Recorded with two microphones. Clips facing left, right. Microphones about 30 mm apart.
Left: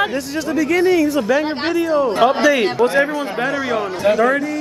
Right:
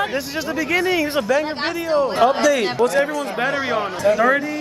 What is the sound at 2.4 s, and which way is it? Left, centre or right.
Speech, left.